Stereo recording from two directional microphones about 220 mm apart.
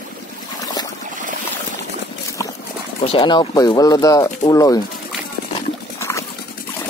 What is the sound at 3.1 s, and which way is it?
Speech, 20° left (ahead or behind).